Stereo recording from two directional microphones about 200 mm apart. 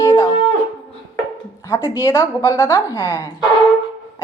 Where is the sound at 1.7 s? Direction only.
15° left (ahead or behind).